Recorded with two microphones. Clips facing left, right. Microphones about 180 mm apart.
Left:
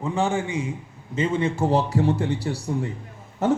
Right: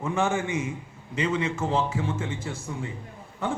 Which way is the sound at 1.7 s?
40° left (ahead or behind).